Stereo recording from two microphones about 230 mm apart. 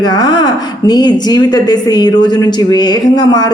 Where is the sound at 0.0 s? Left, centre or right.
Centre.